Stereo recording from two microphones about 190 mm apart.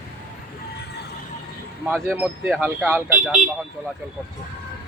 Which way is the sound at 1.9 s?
10° right (ahead or behind).